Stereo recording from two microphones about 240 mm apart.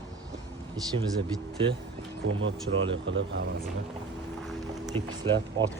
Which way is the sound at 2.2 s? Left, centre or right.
Right.